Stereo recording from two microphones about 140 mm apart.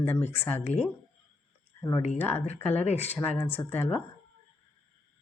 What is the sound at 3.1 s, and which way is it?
Speech, 15° left (ahead or behind).